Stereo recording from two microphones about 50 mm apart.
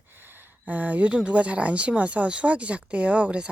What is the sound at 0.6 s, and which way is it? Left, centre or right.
Speech, right.